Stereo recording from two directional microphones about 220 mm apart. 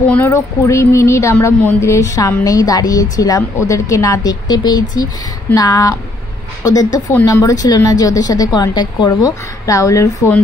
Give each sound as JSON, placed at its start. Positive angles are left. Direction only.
{"t": 0.1, "sound": "speech", "side_deg": 10}